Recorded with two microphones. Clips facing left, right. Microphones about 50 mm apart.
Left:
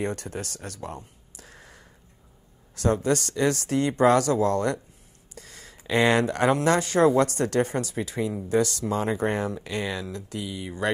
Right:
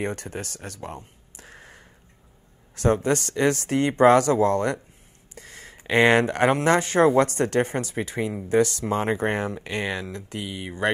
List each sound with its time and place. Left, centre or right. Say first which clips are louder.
0.0 s speech: even; centre
0.8 s a sound: even; centre
2.7 s speech: right 2 dB; right